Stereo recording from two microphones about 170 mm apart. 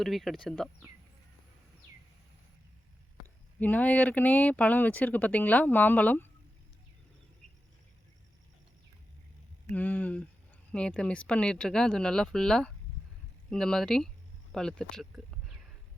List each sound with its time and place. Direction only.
0.0 s speech: centre (ahead or behind)
3.6 s speech: 10° left (ahead or behind)
9.7 s speech: 10° left (ahead or behind)